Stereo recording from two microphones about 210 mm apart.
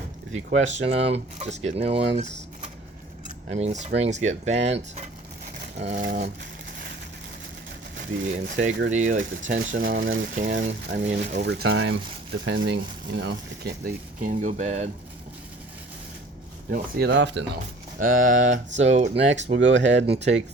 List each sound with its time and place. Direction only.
0.3 s speech: 30° right (ahead or behind)
3.2 s speech: 35° right (ahead or behind)
5.8 s speech: 55° right (ahead or behind)
6.1 s speech: 40° right (ahead or behind)
8.3 s speech: 35° right (ahead or behind)
9.6 s speech: 45° right (ahead or behind)
11.3 s speech: 55° right (ahead or behind); by 14.8 s 35° right (ahead or behind)
16.6 s speech: 45° right (ahead or behind)
18.0 s speech: 40° right (ahead or behind)
19.1 s speech: 60° right (ahead or behind)
20.1 s speech: 30° right (ahead or behind)